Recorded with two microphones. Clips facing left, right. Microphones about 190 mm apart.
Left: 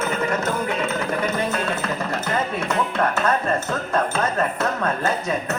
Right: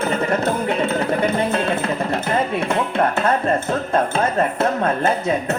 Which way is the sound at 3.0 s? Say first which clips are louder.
Right 3 dB; 30° right (ahead or behind).